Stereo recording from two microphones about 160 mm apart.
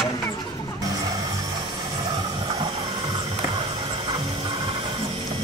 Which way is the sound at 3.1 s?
30° right (ahead or behind).